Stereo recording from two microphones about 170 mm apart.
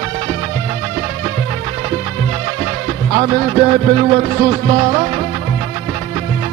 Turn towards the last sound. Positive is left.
turn(degrees=-35)  # may be behind; listen again after turning